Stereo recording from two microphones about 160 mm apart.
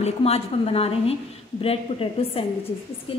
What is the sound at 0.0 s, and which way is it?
A woman's voice, 40° left (ahead or behind).